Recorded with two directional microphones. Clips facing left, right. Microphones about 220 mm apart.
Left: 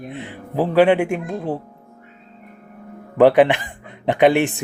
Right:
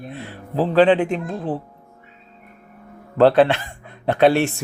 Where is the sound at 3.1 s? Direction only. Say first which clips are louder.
Left 1 dB; 15° left (ahead or behind).